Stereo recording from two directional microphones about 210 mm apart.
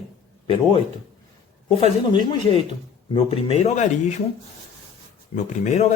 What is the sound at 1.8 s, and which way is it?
Speech, 25° left (ahead or behind).